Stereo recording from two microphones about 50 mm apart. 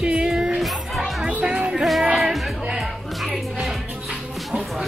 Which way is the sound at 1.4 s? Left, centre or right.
Right.